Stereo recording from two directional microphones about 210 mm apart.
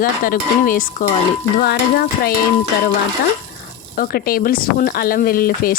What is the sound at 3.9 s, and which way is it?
Speech, 45° left (ahead or behind).